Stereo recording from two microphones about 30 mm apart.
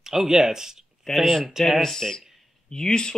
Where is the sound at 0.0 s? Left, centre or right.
Centre.